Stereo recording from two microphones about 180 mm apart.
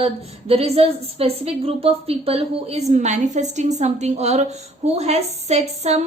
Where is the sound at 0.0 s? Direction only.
35° right (ahead or behind).